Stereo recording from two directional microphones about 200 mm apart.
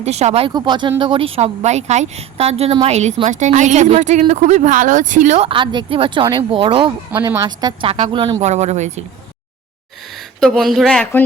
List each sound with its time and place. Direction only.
0.0 s speech: 35° right (ahead or behind)
7.1 s a woman's voice: 15° right (ahead or behind); by 9.0 s 35° right (ahead or behind)
10.4 s a woman's voice: centre (ahead or behind)